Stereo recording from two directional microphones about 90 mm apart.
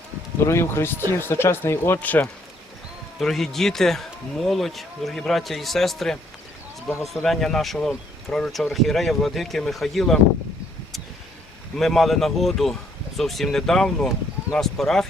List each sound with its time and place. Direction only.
0.4 s speech: 30° left (ahead or behind)
3.2 s speech: 5° left (ahead or behind)
11.8 s speech: centre (ahead or behind)